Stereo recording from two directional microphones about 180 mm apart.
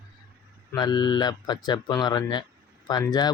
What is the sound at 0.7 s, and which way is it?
Speech, 25° left (ahead or behind).